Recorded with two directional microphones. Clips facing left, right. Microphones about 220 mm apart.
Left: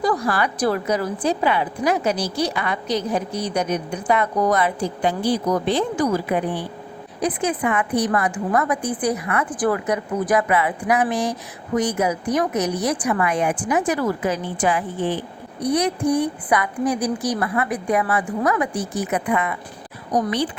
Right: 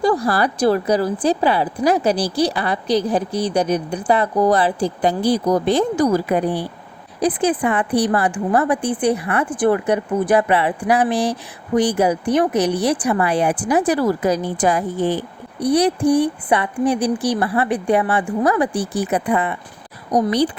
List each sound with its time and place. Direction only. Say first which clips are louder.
0.0 s a woman's voice: right 4 dB; 30° right (ahead or behind)